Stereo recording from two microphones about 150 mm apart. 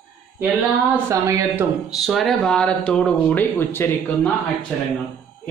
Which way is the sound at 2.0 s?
Centre (ahead or behind).